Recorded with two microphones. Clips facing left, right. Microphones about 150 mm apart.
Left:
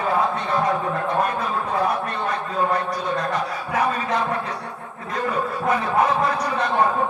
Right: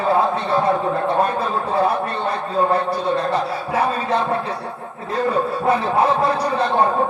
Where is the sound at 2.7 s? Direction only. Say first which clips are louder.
Right 4 dB; 30° right (ahead or behind).